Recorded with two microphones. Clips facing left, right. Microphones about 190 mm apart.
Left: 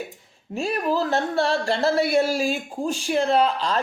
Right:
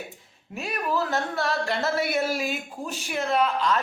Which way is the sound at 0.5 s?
30° left (ahead or behind).